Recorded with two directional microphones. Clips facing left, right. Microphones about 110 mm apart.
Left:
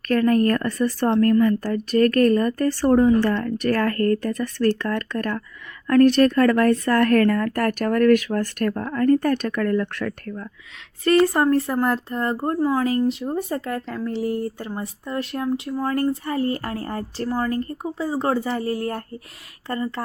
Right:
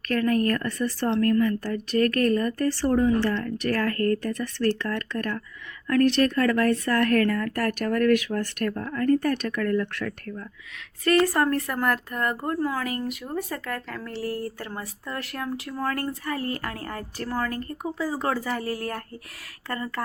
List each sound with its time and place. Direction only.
0.1 s speech: 40° left (ahead or behind)
11.0 s speech: 25° left (ahead or behind)